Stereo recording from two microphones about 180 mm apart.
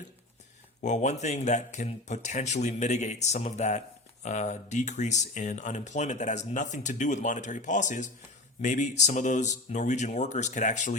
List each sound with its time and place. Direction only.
0.8 s speech: 40° left (ahead or behind)